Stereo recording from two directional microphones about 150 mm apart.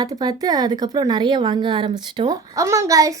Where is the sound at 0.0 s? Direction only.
25° right (ahead or behind).